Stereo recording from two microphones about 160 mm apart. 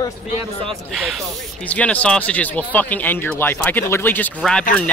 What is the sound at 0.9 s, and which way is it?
Speech, centre (ahead or behind).